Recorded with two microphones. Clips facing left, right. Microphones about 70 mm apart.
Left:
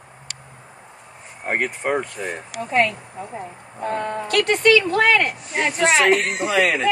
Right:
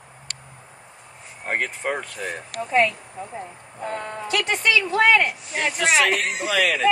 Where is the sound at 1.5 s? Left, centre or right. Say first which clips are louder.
Left 3 dB; centre.